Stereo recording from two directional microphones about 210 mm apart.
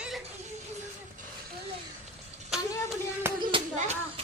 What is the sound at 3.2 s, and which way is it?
Hands, 20° right (ahead or behind).